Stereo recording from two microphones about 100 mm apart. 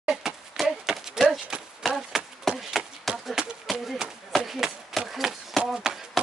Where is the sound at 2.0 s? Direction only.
Centre (ahead or behind).